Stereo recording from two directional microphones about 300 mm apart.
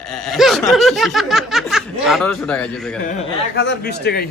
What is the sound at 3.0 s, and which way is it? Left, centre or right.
Speech, left.